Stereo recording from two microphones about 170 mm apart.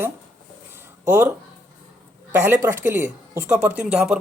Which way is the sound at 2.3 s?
10° right (ahead or behind).